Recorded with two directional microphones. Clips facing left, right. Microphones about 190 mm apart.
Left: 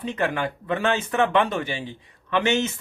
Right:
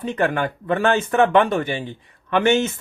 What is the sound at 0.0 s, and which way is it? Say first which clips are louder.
Speech: right 4 dB; 50° right (ahead or behind).